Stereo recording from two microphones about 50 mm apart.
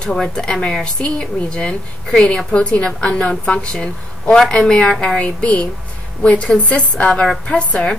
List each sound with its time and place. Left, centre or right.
0.0 s a woman's voice: centre